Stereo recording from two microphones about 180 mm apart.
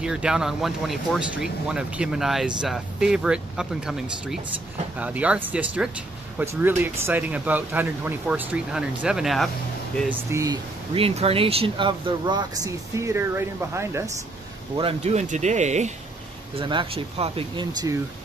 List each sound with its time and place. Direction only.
0.0 s speech: 5° right (ahead or behind)
10.0 s speech: 15° right (ahead or behind)
11.0 s speech: 30° right (ahead or behind); by 14.1 s 15° right (ahead or behind)
14.8 s speech: 35° right (ahead or behind)
16.5 s speech: 30° right (ahead or behind)